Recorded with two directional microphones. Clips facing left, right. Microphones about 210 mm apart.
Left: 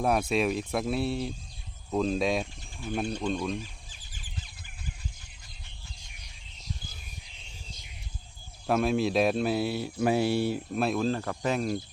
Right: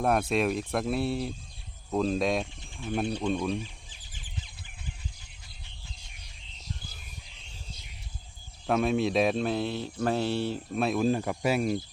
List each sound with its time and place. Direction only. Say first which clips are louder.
0.0 s speech: even; centre (ahead or behind)
8.6 s speech: even; centre (ahead or behind)
11.0 s speech: right 2 dB; 15° right (ahead or behind)